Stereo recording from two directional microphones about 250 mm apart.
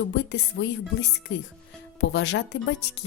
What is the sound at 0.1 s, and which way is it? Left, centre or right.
Speech, left.